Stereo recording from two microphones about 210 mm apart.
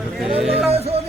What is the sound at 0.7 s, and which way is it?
Music, 30° right (ahead or behind).